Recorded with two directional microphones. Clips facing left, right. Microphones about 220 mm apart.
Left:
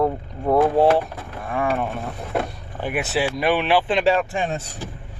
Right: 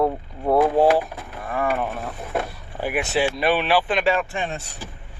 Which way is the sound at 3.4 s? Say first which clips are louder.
Left 1 dB; 15° left (ahead or behind).